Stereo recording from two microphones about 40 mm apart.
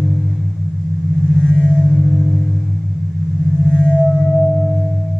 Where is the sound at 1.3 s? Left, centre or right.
Left.